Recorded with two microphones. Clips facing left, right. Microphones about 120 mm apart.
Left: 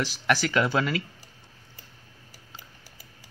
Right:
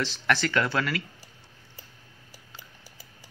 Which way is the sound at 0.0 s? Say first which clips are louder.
Left 1 dB; 10° left (ahead or behind).